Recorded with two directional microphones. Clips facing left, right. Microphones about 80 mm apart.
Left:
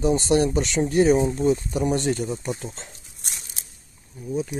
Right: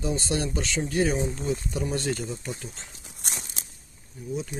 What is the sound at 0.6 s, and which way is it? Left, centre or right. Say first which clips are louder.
Speech: left 6 dB; left.